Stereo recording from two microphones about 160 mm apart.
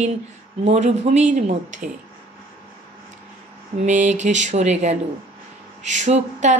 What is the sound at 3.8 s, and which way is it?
Speech, 50° right (ahead or behind).